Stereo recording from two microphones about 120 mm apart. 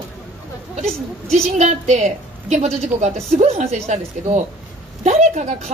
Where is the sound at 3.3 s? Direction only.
65° right (ahead or behind).